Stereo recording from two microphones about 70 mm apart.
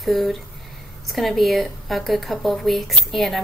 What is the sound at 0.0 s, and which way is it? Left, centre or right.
Speech, centre.